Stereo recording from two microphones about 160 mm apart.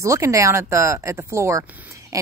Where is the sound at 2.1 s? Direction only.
20° right (ahead or behind).